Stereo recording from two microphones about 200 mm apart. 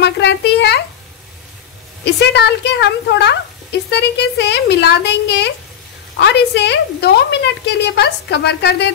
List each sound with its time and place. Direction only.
0.0 s a woman's voice: 55° left (ahead or behind)
2.0 s a woman's voice: 60° left (ahead or behind)